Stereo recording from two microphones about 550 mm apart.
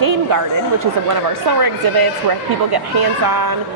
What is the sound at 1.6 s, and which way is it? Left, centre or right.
A woman's voice, right.